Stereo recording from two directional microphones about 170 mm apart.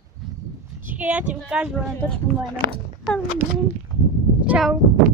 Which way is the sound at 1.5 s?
5° right (ahead or behind).